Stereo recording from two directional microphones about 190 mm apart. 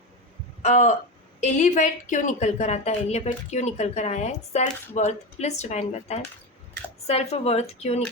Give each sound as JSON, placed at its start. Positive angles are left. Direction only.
{"t": 0.6, "sound": "a woman's voice", "side_deg": 35}